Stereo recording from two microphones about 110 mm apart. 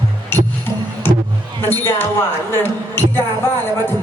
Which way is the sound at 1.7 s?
20° left (ahead or behind).